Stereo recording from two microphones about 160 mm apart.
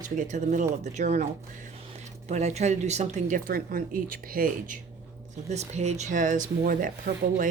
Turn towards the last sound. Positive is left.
turn(degrees=-55)  # may be behind; listen again after turning